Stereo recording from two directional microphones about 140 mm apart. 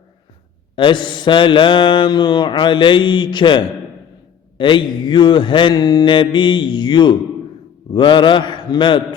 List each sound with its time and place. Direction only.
0.8 s mantra: 35° left (ahead or behind)